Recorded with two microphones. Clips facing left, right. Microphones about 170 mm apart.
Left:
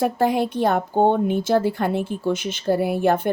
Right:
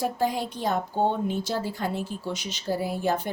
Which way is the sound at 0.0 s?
65° left (ahead or behind).